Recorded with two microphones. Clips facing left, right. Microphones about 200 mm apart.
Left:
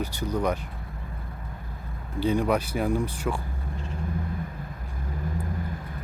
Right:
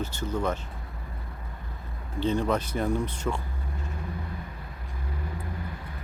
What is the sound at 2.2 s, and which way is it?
Speech, 10° left (ahead or behind).